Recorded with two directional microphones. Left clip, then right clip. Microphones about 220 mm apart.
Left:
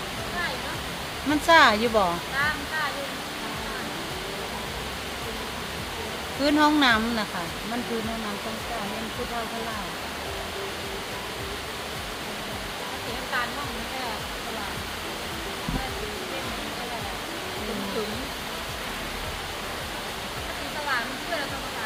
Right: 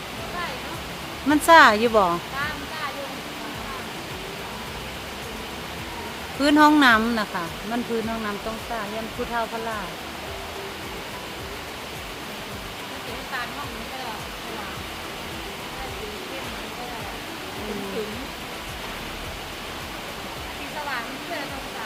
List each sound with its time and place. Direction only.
1.3 s speech: 35° right (ahead or behind)
6.4 s speech: 35° right (ahead or behind)